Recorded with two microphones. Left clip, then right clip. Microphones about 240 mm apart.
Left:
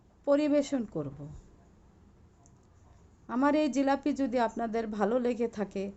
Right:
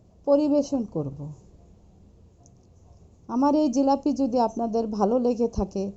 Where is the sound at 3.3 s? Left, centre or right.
Left.